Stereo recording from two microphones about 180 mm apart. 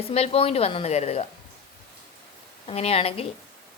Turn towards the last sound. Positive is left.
turn(degrees=35)  # may be behind; listen again after turning